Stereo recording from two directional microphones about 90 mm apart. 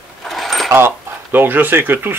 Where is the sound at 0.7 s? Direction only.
25° right (ahead or behind).